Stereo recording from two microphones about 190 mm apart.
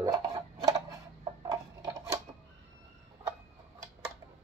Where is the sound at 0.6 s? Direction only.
20° right (ahead or behind).